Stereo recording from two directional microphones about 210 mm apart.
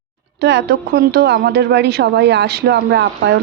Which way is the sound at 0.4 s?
55° right (ahead or behind).